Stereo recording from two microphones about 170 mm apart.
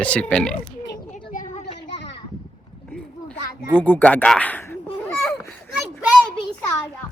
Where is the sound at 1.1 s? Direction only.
50° left (ahead or behind).